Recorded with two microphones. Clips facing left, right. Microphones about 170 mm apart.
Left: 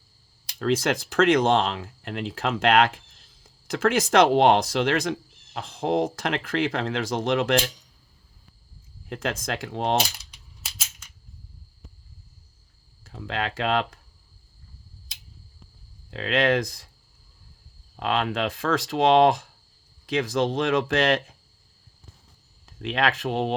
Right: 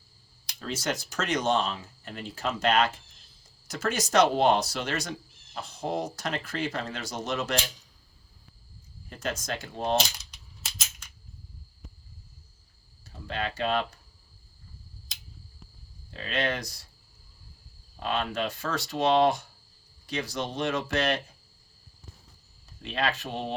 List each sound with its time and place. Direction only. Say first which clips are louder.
0.6 s speech: left 8 dB; 90° left
9.0 s speech: left 4 dB; 90° left
13.1 s speech: left 3 dB; 90° left
16.0 s speech: left 7 dB; 90° left
18.0 s speech: left 4 dB; 90° left
22.6 s speech: left 5 dB; 90° left